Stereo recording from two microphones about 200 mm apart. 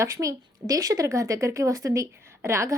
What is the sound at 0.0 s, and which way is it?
A woman's voice, 15° right (ahead or behind).